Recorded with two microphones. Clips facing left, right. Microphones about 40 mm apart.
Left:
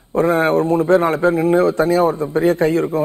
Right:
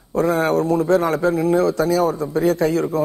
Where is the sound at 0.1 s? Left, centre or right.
Left.